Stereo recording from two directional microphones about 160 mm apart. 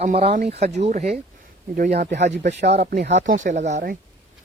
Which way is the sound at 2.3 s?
90° right.